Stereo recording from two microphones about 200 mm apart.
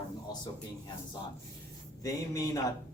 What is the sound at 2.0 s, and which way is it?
Speech, 15° left (ahead or behind).